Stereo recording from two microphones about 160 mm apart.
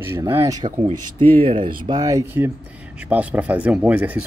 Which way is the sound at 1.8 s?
25° right (ahead or behind).